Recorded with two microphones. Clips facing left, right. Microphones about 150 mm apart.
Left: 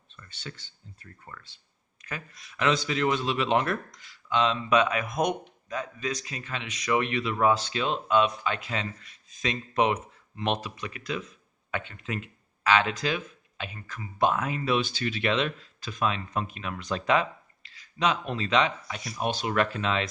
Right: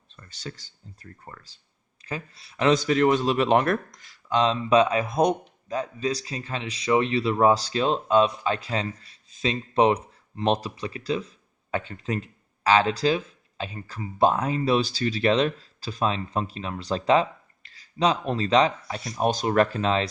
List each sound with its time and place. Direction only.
0.2 s a man's voice: 35° right (ahead or behind)
17.6 s a sound: 45° right (ahead or behind)
18.0 s a man's voice: 35° right (ahead or behind)